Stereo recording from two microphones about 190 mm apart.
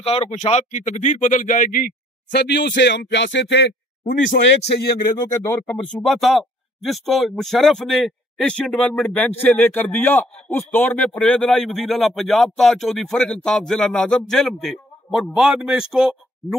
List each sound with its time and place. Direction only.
0.0 s speech: 30° left (ahead or behind)
2.3 s a man's voice: 60° left (ahead or behind)
5.1 s speech: 15° left (ahead or behind); by 16.1 s 5° right (ahead or behind)